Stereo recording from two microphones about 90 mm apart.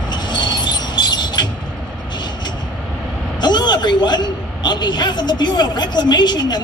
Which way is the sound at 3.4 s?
55° left (ahead or behind).